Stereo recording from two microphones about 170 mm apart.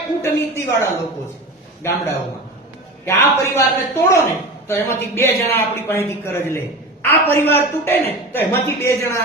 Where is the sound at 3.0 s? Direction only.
15° left (ahead or behind).